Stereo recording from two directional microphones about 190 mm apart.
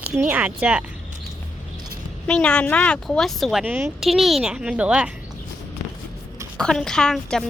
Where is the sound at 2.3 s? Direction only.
5° left (ahead or behind).